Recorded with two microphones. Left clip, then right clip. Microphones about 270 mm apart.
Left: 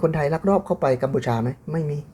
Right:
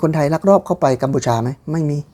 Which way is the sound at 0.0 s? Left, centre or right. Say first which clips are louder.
Right 5 dB; right.